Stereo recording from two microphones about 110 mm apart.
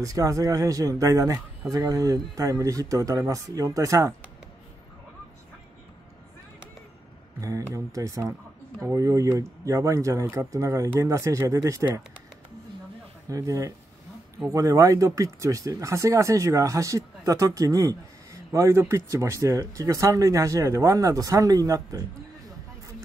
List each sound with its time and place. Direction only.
0.0 s speech: 30° right (ahead or behind)
7.3 s speech: 30° right (ahead or behind)
10.5 s speech: 30° right (ahead or behind)
13.3 s speech: 30° right (ahead or behind)